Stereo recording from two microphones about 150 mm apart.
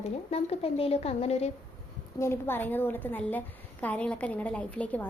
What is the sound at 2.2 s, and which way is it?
A woman's voice, 15° left (ahead or behind).